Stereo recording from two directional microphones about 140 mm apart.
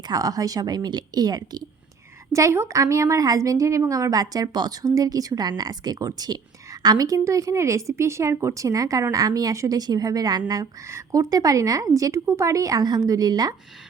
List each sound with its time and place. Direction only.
0.1 s speech: 25° right (ahead or behind)